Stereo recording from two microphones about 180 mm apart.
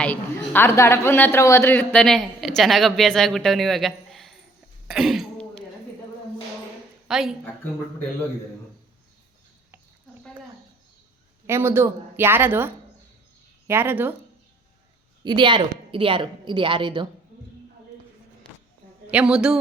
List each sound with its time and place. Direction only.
0.0 s a man's voice: 10° left (ahead or behind)
4.9 s throat clearing: centre (ahead or behind)
7.1 s a man's voice: centre (ahead or behind)
11.4 s a woman's voice: 15° right (ahead or behind)
15.2 s a woman's voice: 25° right (ahead or behind)
19.0 s a woman's voice: 5° right (ahead or behind)